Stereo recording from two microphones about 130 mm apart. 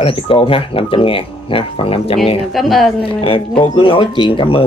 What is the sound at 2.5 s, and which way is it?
Speech, centre (ahead or behind).